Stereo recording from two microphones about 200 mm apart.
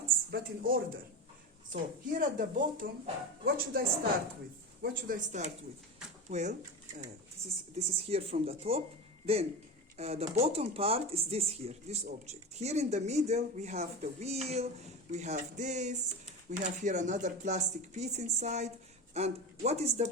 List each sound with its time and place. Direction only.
0.3 s speech: 50° right (ahead or behind)
1.7 s speech: 40° right (ahead or behind)
8.1 s speech: 30° right (ahead or behind)